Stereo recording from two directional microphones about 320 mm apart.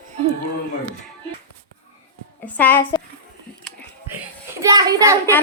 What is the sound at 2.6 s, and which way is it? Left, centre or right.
Speech, centre.